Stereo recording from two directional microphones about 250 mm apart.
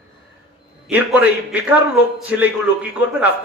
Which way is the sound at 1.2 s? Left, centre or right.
Centre.